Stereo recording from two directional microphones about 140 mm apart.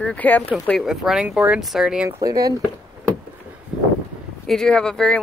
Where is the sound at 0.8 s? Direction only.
5° right (ahead or behind).